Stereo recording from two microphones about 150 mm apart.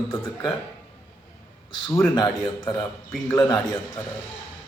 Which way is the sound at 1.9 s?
25° left (ahead or behind).